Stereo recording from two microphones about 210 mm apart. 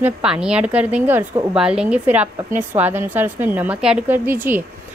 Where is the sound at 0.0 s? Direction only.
5° right (ahead or behind).